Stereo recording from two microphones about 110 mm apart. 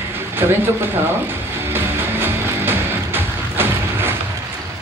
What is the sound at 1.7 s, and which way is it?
Music, 20° right (ahead or behind).